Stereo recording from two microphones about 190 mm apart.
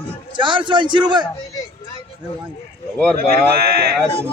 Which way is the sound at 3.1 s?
50° right (ahead or behind).